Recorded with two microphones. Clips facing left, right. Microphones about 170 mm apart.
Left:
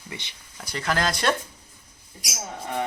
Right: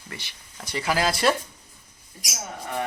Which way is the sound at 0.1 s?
20° left (ahead or behind).